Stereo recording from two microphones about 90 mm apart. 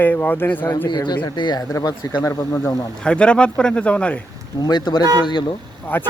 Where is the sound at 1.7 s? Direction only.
45° left (ahead or behind).